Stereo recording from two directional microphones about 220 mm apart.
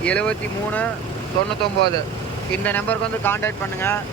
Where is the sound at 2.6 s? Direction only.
5° left (ahead or behind).